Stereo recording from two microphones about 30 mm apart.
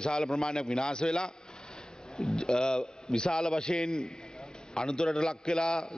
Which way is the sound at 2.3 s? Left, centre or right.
Left.